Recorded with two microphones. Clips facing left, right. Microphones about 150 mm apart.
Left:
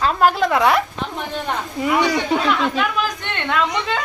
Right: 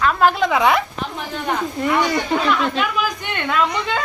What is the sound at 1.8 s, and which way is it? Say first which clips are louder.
Speech: left 2 dB; 5° left (ahead or behind).